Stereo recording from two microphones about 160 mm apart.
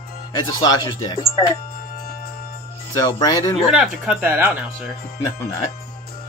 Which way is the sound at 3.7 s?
5° right (ahead or behind).